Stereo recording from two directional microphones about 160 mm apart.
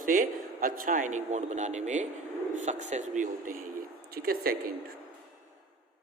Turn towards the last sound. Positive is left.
turn(degrees=-70)  # may be behind; listen again after turning